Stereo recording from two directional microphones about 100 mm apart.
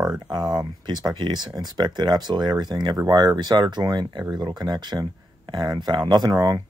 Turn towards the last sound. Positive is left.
turn(degrees=-35)  # may be behind; listen again after turning